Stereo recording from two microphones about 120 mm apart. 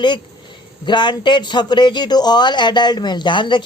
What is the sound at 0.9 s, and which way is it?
A man's voice, 40° left (ahead or behind).